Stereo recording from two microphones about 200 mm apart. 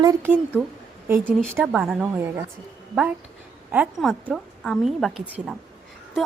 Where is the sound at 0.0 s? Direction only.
15° right (ahead or behind).